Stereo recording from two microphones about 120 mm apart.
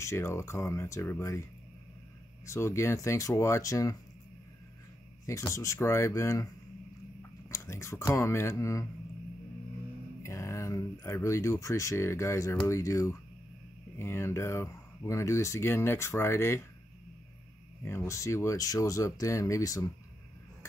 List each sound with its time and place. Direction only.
0.0 s speech: 25° left (ahead or behind)
2.4 s speech: 25° left (ahead or behind)
5.2 s speech: 25° left (ahead or behind)
10.2 s speech: 25° left (ahead or behind)
17.8 s speech: 25° left (ahead or behind)